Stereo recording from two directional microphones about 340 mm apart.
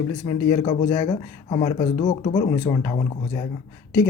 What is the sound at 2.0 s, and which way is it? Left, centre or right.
Speech, left.